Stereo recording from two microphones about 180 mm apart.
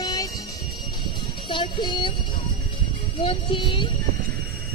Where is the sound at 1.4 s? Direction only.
25° left (ahead or behind).